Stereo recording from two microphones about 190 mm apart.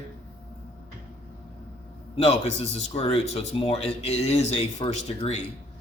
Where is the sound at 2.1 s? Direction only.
35° left (ahead or behind).